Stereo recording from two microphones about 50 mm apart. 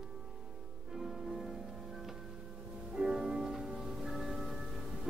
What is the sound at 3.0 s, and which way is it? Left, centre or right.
Music, centre.